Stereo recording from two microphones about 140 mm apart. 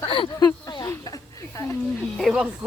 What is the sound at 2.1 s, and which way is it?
Speech, 5° right (ahead or behind).